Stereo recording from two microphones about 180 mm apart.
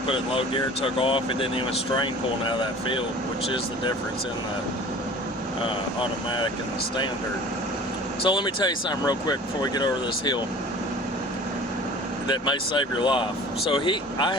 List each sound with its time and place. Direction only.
0.1 s speech: 30° left (ahead or behind)
8.2 s speech: 25° left (ahead or behind)
12.3 s speech: 25° left (ahead or behind)